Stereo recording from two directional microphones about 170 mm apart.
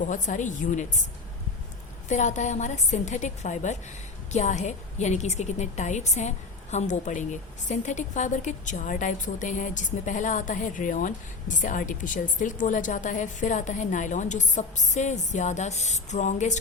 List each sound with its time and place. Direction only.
0.0 s a woman's voice: 50° left (ahead or behind)
2.0 s a woman's voice: 45° left (ahead or behind)